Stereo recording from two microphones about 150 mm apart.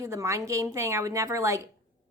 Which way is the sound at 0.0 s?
20° right (ahead or behind).